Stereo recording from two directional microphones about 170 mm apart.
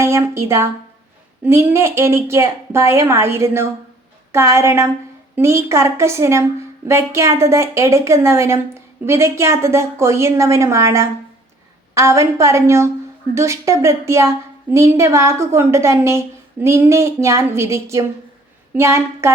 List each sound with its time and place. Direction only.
0.0 s a woman's voice: 15° right (ahead or behind)